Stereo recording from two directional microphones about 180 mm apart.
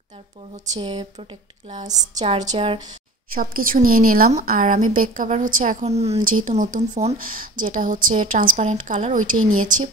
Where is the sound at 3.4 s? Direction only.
50° right (ahead or behind).